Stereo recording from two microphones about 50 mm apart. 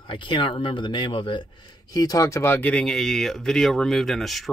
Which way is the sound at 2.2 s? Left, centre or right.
Left.